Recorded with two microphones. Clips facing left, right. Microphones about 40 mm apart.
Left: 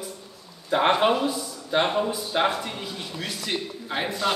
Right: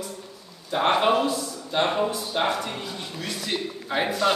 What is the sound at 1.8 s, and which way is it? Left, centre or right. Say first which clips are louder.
Speech: even; centre.